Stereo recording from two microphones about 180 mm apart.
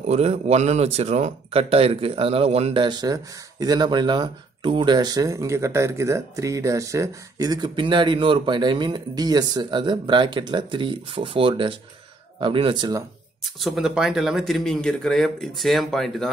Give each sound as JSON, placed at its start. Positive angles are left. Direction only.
{"t": 0.0, "sound": "speech", "side_deg": -35}
{"t": 13.4, "sound": "speech", "side_deg": 0}